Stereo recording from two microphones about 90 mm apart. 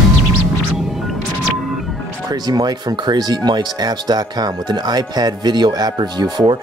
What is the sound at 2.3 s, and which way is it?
Speech, 50° right (ahead or behind).